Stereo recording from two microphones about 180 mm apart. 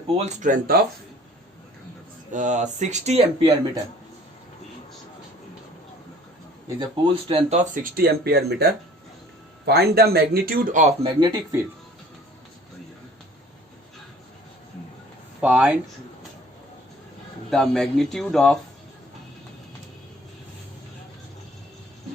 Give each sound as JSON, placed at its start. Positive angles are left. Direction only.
{"t": 0.3, "sound": "speech", "side_deg": -45}
{"t": 2.3, "sound": "speech", "side_deg": -45}
{"t": 6.7, "sound": "speech", "side_deg": -30}
{"t": 11.2, "sound": "speech", "side_deg": -20}
{"t": 15.4, "sound": "a man's voice", "side_deg": -5}
{"t": 17.5, "sound": "a man's voice", "side_deg": 5}